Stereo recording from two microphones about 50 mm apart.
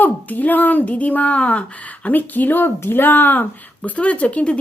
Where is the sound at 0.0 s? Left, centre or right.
Left.